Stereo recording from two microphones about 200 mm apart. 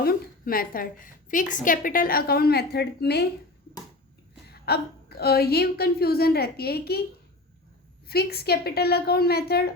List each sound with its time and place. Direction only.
0.0 s a woman's voice: 45° left (ahead or behind)
4.4 s a woman's voice: 50° left (ahead or behind)
8.0 s a woman's voice: 50° left (ahead or behind)